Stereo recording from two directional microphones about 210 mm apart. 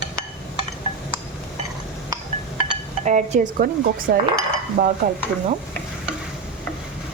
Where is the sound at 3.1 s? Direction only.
35° right (ahead or behind).